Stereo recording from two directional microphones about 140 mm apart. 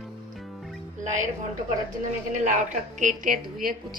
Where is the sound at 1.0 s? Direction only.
60° right (ahead or behind).